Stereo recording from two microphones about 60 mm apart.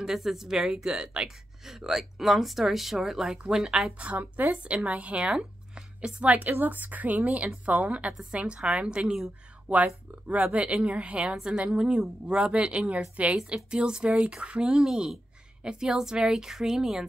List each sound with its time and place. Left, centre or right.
0.0 s speech: centre
4.4 s a woman's voice: right; by 17.0 s centre